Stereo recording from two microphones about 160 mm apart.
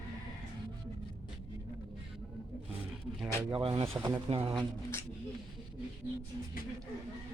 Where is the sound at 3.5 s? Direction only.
35° right (ahead or behind).